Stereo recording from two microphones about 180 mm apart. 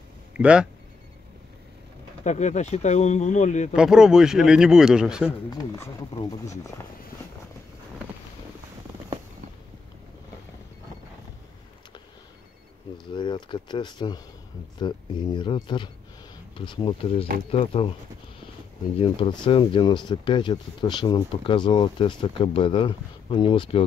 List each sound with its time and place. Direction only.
0.3 s speech: 5° right (ahead or behind)
2.2 s speech: 40° left (ahead or behind)
3.7 s speech: 5° right (ahead or behind)
6.7 s speech: 15° left (ahead or behind)
13.1 s speech: 25° left (ahead or behind)
18.9 s speech: 30° left (ahead or behind)